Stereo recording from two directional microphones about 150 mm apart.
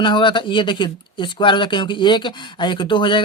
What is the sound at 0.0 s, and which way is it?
Speech, 35° left (ahead or behind).